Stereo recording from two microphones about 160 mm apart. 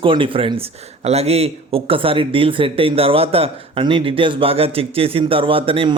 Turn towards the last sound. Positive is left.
turn(degrees=-35)  # may be behind; listen again after turning